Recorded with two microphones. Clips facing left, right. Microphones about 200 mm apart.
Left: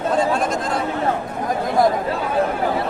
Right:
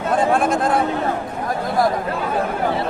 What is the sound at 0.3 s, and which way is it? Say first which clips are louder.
Chatter: right 3 dB; 55° right (ahead or behind).